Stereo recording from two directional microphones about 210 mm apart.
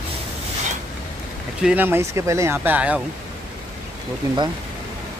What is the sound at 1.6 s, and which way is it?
Speech, 5° right (ahead or behind).